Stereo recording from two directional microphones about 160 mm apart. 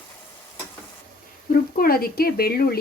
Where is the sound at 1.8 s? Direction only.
65° left (ahead or behind).